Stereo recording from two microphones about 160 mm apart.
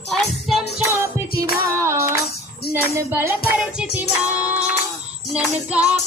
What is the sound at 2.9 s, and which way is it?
Music, 15° right (ahead or behind).